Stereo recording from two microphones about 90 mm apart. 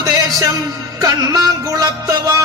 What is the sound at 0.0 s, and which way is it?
Music, 40° right (ahead or behind).